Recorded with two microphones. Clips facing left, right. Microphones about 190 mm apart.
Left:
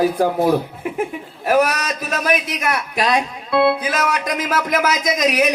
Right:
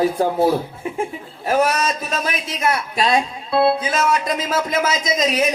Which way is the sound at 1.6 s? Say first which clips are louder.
Right 2 dB; 25° right (ahead or behind).